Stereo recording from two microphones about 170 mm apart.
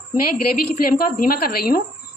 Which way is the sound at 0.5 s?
60° left (ahead or behind).